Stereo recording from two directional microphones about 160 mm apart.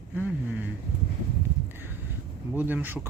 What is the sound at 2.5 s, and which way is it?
Speech, 10° right (ahead or behind).